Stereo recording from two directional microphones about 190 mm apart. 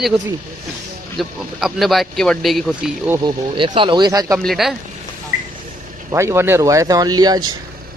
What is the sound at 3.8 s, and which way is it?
Speech, 25° right (ahead or behind).